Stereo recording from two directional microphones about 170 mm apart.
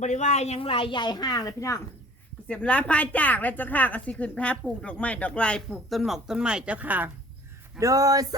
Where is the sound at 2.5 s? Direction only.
5° left (ahead or behind); by 8.3 s 20° right (ahead or behind).